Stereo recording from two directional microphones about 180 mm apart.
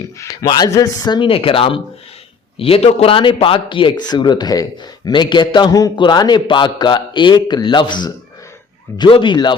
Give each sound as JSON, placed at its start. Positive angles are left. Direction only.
{"t": 0.2, "sound": "a man's voice", "side_deg": 20}